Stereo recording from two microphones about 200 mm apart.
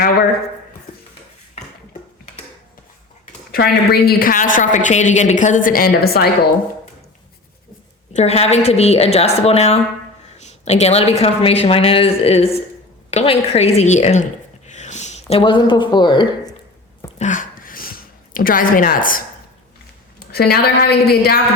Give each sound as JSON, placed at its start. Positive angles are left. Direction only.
{"t": 1.5, "sound": "dishes", "side_deg": 35}
{"t": 3.5, "sound": "a woman's voice", "side_deg": 50}
{"t": 8.1, "sound": "speech", "side_deg": 30}
{"t": 14.7, "sound": "a sound", "side_deg": 35}
{"t": 17.2, "sound": "a sound", "side_deg": 40}
{"t": 20.1, "sound": "a woman's voice", "side_deg": 50}